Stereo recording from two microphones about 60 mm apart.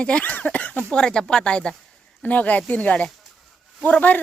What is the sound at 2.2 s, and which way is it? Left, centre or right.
Speech, left.